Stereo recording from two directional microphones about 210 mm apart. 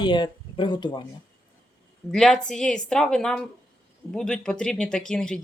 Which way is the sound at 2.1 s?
Centre (ahead or behind).